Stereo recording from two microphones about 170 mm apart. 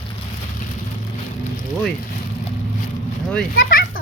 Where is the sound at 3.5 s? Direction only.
55° left (ahead or behind).